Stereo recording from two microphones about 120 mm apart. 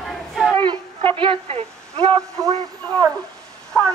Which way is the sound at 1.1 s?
45° right (ahead or behind).